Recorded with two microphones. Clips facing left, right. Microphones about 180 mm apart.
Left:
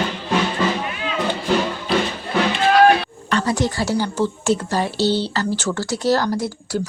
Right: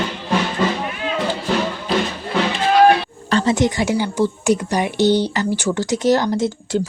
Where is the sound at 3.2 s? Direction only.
25° right (ahead or behind).